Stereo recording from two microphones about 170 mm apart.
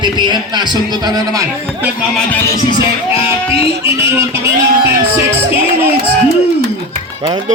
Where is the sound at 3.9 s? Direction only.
15° right (ahead or behind).